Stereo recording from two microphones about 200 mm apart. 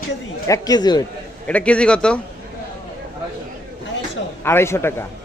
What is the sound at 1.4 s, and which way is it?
Speech, 5° left (ahead or behind).